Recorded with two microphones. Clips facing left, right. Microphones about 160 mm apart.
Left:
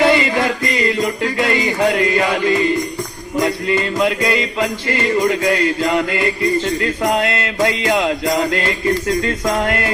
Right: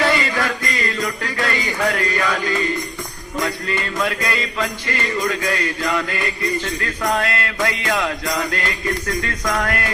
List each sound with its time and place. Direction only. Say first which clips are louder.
0.0 s music: left 5 dB; 20° left (ahead or behind)